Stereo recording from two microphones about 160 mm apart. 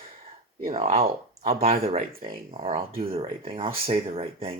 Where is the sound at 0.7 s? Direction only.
40° right (ahead or behind).